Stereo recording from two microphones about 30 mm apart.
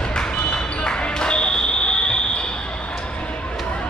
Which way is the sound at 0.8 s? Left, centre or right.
Left.